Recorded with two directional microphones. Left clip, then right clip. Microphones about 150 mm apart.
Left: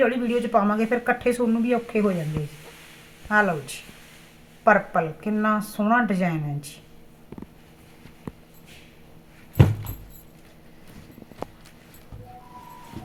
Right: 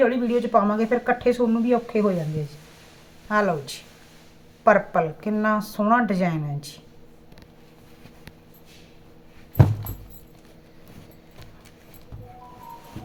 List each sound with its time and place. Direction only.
0.0 s speech: 15° right (ahead or behind)
3.2 s speech: 15° right (ahead or behind)